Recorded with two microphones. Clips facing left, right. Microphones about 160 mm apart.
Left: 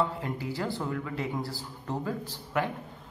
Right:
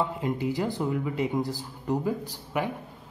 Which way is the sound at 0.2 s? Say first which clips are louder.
Right 5 dB; 15° right (ahead or behind).